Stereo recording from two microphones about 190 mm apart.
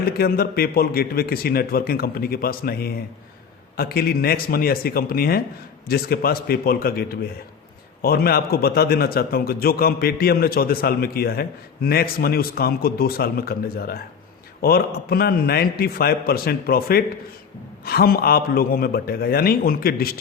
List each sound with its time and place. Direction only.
0.0 s a man's voice: 55° left (ahead or behind)